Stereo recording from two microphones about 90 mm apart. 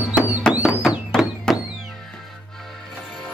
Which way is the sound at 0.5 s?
10° left (ahead or behind).